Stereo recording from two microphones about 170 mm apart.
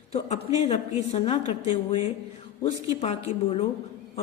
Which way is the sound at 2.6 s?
40° left (ahead or behind).